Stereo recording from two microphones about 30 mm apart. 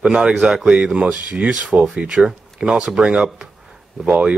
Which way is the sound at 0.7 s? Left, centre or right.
Right.